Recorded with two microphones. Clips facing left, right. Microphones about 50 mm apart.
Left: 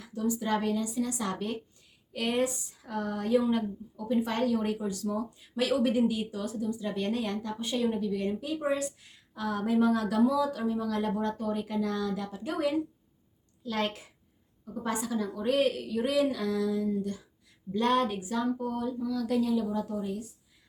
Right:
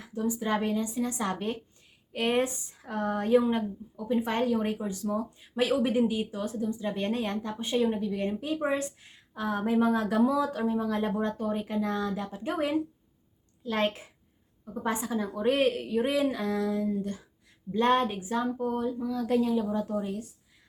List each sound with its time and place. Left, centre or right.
0.0 s a woman's voice: right